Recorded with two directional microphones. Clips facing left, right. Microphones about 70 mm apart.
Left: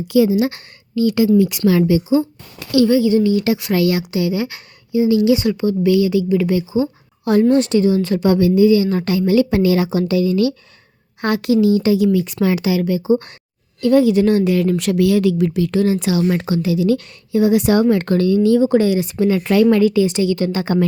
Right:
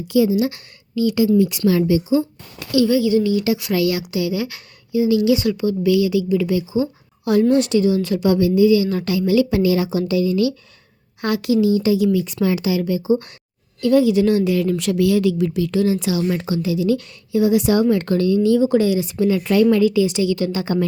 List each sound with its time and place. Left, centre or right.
0.1 s a woman's voice: left
2.9 s a woman's voice: left